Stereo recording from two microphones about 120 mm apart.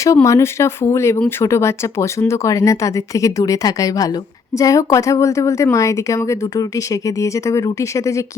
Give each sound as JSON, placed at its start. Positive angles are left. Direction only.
{"t": 0.0, "sound": "speech", "side_deg": 25}